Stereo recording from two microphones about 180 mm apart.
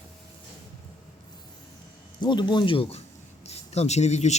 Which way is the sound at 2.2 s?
25° left (ahead or behind).